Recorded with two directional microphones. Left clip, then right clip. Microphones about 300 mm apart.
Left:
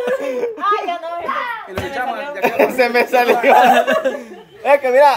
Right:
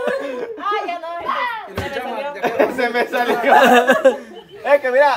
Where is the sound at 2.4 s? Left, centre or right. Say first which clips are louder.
Left 4 dB; left.